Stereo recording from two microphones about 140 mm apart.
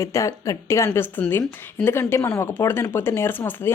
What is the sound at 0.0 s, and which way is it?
Speech, 20° left (ahead or behind).